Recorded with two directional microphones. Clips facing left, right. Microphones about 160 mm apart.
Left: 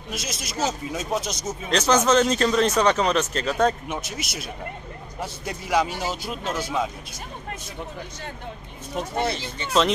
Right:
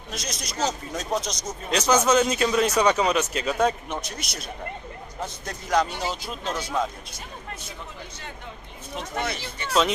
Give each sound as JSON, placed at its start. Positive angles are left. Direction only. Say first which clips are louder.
{"t": 0.1, "sound": "a man's voice", "louder": "left 2 dB", "side_deg": 5}
{"t": 1.7, "sound": "speech", "louder": "left 1 dB", "side_deg": -10}
{"t": 3.9, "sound": "a man's voice", "louder": "left 2 dB", "side_deg": 5}
{"t": 8.9, "sound": "speech", "louder": "left 4 dB", "side_deg": 35}